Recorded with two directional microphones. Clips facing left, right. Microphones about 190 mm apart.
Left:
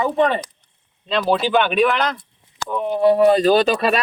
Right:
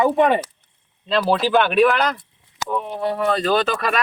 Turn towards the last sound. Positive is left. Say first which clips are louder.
# left 4 dB
turn(degrees=15)  # may be behind; listen again after turning